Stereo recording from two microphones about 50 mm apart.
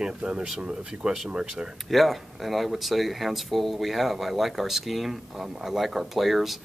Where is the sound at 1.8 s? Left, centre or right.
Centre.